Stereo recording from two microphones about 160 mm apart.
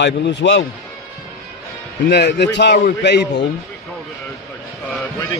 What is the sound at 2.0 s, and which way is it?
A man's voice, 90° left.